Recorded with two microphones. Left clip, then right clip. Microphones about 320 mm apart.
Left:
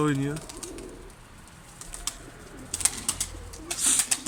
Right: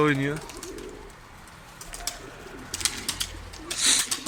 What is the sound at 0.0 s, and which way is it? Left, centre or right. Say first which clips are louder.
Speech: right 4 dB; centre.